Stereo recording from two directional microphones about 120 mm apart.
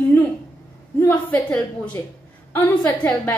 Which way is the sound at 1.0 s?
20° left (ahead or behind).